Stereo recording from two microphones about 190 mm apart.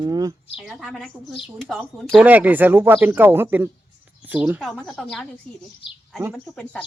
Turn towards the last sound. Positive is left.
turn(degrees=5)  # may be behind; listen again after turning